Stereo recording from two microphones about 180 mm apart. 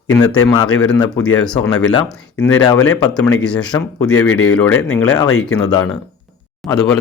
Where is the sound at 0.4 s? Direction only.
20° left (ahead or behind).